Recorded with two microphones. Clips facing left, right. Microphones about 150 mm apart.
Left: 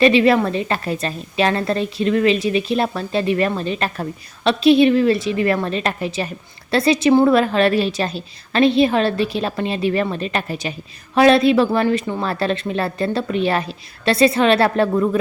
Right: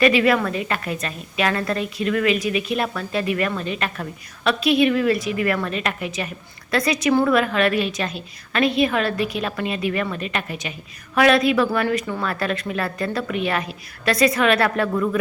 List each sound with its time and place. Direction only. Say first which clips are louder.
0.0 s a woman's voice: left 4 dB; 30° left (ahead or behind)